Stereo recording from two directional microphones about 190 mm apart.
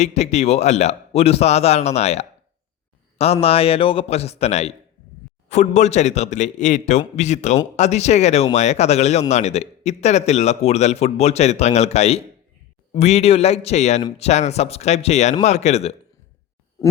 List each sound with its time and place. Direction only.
0.0 s a man's voice: 35° left (ahead or behind)
3.4 s a man's voice: 30° left (ahead or behind)